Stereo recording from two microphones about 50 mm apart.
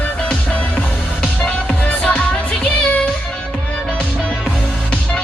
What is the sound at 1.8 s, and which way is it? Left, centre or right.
Music, left.